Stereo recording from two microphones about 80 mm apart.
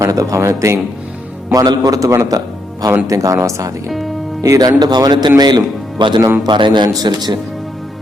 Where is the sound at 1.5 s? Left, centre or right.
Right.